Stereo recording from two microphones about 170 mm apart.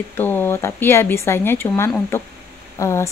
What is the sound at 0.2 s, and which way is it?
Speech, 10° left (ahead or behind).